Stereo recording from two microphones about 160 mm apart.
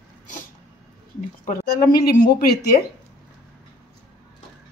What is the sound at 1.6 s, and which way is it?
Speech, 75° left (ahead or behind).